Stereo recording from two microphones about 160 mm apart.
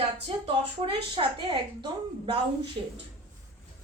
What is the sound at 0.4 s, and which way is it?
A woman's voice, 35° right (ahead or behind).